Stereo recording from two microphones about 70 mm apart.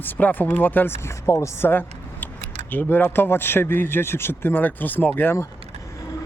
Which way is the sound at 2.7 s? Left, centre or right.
Left.